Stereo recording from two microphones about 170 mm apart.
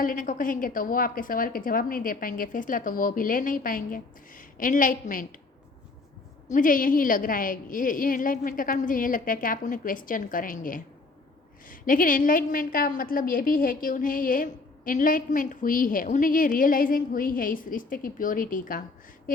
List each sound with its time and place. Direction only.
0.0 s a woman's voice: 55° left (ahead or behind)
6.5 s a woman's voice: 55° left (ahead or behind)